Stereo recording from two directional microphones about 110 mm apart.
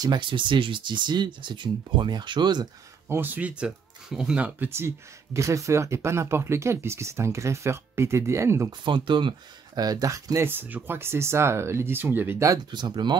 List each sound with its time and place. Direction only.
0.0 s speech: 45° right (ahead or behind)
3.1 s speech: 20° right (ahead or behind)
4.6 s speech: 20° right (ahead or behind)
8.8 s speech: 50° right (ahead or behind)
9.8 s speech: 35° right (ahead or behind); by 12.4 s 20° right (ahead or behind)
12.4 s speech: 40° right (ahead or behind)